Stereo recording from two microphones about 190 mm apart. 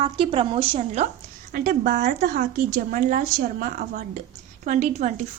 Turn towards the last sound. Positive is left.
turn(degrees=-40)  # may be behind; listen again after turning